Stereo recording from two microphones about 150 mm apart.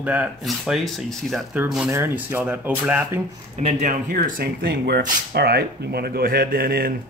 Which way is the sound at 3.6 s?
45° right (ahead or behind).